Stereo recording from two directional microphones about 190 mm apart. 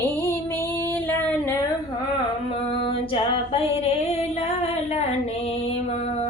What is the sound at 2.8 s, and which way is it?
Female singing, 30° left (ahead or behind).